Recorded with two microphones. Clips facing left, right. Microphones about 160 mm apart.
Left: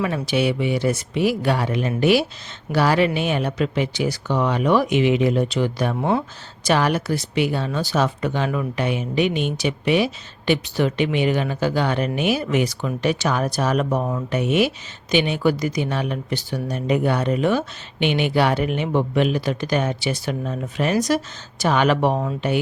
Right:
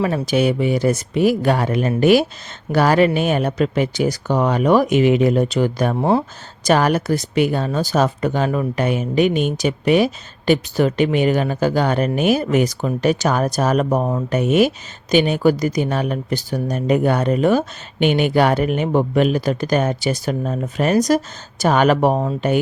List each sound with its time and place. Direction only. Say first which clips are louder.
0.0 s speech: right 3 dB; 40° right (ahead or behind)
6.7 s speech: right 4 dB; 45° right (ahead or behind)